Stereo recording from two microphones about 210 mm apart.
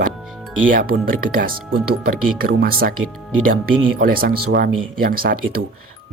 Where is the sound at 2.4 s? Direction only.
45° right (ahead or behind).